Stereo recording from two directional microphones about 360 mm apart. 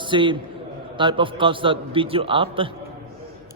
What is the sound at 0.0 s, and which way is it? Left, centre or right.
A man's voice, centre.